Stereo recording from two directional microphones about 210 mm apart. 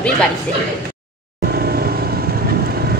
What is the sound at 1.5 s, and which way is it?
Vehicle, 45° right (ahead or behind).